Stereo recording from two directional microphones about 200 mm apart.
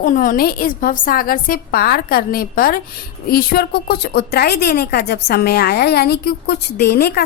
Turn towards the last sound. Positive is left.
turn(degrees=50)  # may be behind; listen again after turning